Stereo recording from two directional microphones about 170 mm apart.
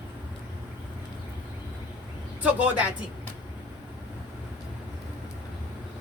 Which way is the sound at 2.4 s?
10° right (ahead or behind).